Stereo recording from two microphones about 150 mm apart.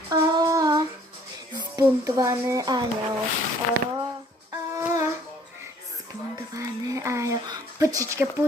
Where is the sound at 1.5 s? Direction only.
25° right (ahead or behind).